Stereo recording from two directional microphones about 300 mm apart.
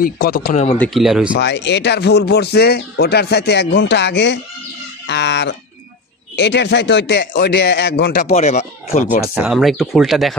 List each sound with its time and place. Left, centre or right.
0.0 s speech: left
0.7 s speech: centre
1.4 s speech: left
9.2 s speech: centre